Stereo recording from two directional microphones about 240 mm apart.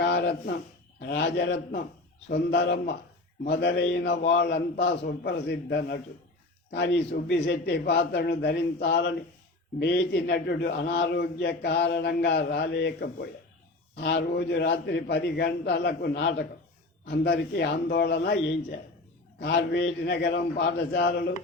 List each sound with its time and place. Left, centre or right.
0.0 s a sound: left
1.0 s a man's voice: left
19.4 s a man's voice: left